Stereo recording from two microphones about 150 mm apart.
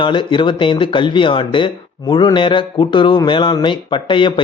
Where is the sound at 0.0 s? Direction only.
35° left (ahead or behind).